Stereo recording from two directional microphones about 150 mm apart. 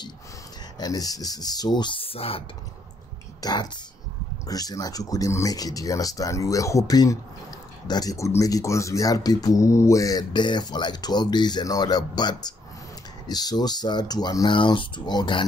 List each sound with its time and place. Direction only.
0.7 s speech: 25° left (ahead or behind)
3.3 s speech: 30° left (ahead or behind)